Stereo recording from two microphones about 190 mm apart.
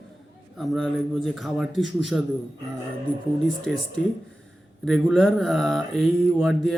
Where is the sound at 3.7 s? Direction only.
Centre (ahead or behind).